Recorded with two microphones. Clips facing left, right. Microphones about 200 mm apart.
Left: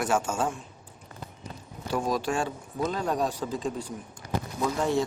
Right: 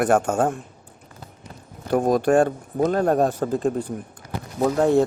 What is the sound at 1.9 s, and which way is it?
Speech, 55° right (ahead or behind).